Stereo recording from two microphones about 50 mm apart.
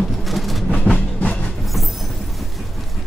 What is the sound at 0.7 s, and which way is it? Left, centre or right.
Train, left.